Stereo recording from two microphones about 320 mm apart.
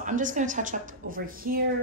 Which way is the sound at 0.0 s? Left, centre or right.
Right.